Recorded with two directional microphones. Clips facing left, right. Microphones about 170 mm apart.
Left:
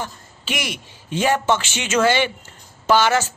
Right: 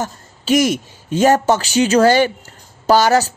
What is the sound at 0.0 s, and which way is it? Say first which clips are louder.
Speech: right 6 dB; 40° right (ahead or behind).